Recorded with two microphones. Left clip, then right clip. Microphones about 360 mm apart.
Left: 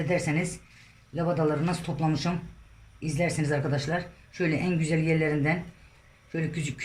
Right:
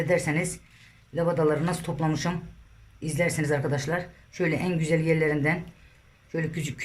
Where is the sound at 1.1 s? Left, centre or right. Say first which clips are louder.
Right 3 dB; centre.